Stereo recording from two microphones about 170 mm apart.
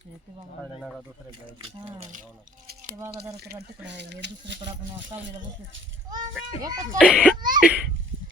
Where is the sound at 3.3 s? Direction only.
70° right (ahead or behind).